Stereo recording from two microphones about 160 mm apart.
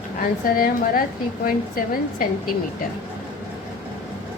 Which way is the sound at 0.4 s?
65° left (ahead or behind).